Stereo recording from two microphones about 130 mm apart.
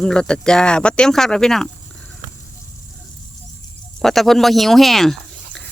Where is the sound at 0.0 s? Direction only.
5° left (ahead or behind).